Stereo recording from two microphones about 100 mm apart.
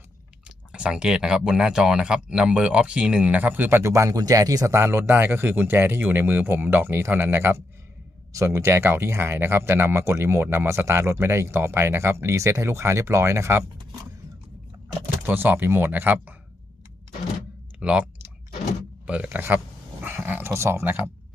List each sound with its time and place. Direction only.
0.4 s speech: 10° right (ahead or behind); by 13.7 s 25° right (ahead or behind)
15.3 s speech: 20° right (ahead or behind)
17.7 s speech: 10° right (ahead or behind)
19.0 s speech: 10° right (ahead or behind)